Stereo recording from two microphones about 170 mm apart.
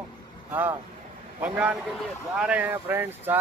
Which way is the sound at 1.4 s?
10° right (ahead or behind).